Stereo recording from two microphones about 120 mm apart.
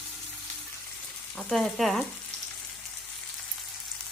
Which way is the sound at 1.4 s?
Centre (ahead or behind).